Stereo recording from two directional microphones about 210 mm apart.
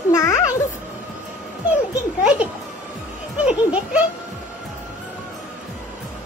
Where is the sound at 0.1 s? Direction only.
15° left (ahead or behind).